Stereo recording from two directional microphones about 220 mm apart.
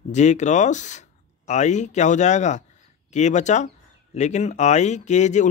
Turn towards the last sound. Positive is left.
turn(degrees=35)  # may be behind; listen again after turning